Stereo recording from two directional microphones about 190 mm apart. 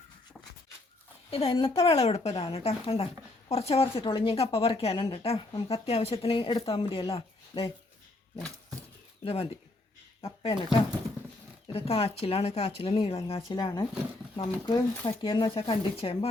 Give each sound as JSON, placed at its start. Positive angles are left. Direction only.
{"t": 1.3, "sound": "speech", "side_deg": 30}
{"t": 9.2, "sound": "speech", "side_deg": 30}
{"t": 11.7, "sound": "speech", "side_deg": 30}